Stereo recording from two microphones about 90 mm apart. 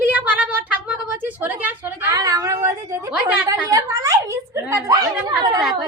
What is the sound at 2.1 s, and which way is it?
A woman's voice, 40° right (ahead or behind).